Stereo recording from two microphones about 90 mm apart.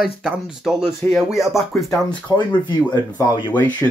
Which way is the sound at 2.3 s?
30° left (ahead or behind).